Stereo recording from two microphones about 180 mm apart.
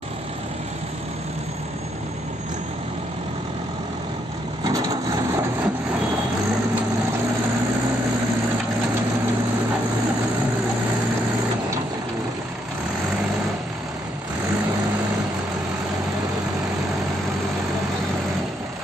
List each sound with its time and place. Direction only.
4.6 s vehicle: 20° right (ahead or behind)